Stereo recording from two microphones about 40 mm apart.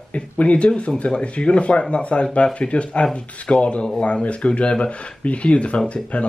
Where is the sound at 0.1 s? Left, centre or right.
Left.